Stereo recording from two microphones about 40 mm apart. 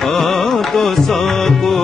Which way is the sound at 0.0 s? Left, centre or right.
Centre.